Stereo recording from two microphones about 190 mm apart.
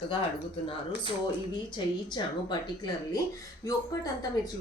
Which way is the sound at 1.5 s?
25° left (ahead or behind).